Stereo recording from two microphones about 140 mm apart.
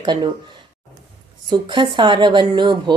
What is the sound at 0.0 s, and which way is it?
Speech, 35° right (ahead or behind).